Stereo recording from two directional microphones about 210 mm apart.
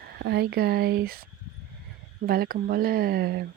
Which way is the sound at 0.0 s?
50° right (ahead or behind).